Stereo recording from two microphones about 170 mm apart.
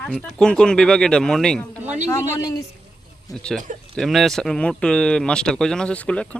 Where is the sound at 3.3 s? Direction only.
5° left (ahead or behind).